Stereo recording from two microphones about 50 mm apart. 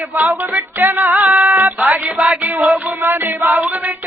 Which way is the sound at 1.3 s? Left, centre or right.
Right.